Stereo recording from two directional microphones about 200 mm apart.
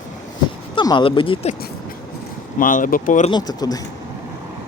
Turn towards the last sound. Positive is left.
turn(degrees=20)  # may be behind; listen again after turning